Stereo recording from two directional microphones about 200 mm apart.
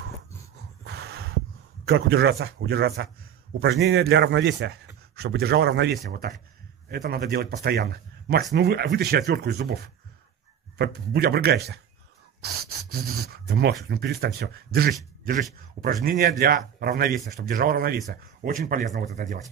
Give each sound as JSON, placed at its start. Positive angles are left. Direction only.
{"t": 0.8, "sound": "snort", "side_deg": -55}
{"t": 1.9, "sound": "a man's voice", "side_deg": -50}
{"t": 10.8, "sound": "a man's voice", "side_deg": -55}